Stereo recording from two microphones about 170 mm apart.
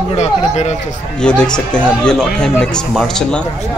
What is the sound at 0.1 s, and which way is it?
Speech, 40° left (ahead or behind).